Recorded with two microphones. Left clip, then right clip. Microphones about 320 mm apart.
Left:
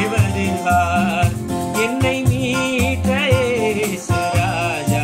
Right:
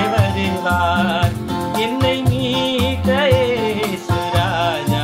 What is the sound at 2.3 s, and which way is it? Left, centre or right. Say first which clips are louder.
Music: right 1 dB; centre.